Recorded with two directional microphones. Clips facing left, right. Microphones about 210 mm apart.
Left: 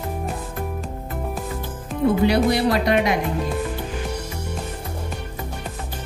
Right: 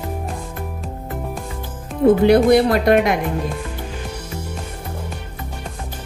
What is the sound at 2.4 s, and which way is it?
Speech, 50° right (ahead or behind).